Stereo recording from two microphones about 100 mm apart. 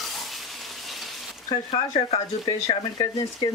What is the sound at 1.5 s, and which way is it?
Speech, 55° left (ahead or behind).